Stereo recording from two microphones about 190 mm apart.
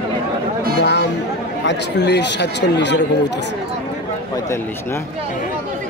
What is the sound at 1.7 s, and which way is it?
Speech, 65° left (ahead or behind).